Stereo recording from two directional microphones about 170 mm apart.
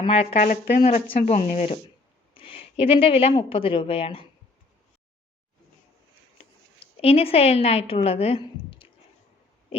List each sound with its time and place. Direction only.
0.0 s speech: 35° left (ahead or behind)
0.3 s a woman's voice: 50° left (ahead or behind); by 4.3 s 35° left (ahead or behind)
7.0 s a woman's voice: 35° left (ahead or behind)